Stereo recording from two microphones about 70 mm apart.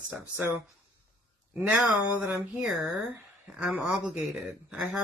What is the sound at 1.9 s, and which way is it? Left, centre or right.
Speech, right.